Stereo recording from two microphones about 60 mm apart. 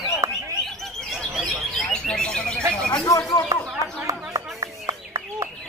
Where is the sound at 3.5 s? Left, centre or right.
Right.